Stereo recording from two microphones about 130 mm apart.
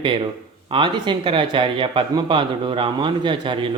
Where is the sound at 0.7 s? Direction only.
40° right (ahead or behind).